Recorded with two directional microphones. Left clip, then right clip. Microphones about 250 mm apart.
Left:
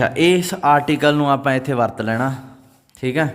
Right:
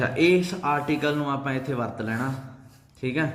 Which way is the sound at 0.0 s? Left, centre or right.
Left.